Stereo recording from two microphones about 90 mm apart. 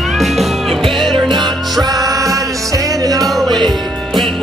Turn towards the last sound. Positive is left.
turn(degrees=-45)  # may be behind; listen again after turning